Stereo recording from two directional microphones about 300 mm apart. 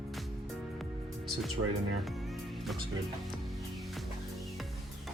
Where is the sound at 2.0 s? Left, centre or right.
Centre.